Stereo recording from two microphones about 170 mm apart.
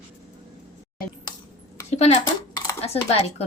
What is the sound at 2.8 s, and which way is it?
Dishes, 35° left (ahead or behind).